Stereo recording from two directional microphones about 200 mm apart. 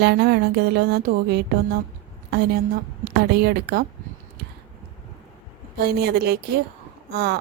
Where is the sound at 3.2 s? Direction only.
55° right (ahead or behind).